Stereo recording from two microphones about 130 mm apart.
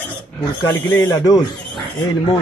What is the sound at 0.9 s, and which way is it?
Speech, 20° left (ahead or behind).